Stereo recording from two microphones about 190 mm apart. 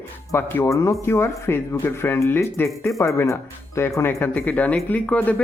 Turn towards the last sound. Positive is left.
turn(degrees=10)  # may be behind; listen again after turning